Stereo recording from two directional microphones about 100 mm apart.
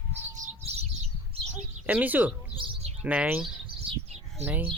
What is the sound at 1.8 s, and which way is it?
Speech, 15° right (ahead or behind).